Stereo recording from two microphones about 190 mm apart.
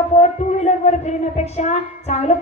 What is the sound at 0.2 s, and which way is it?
A woman's voice, 40° left (ahead or behind).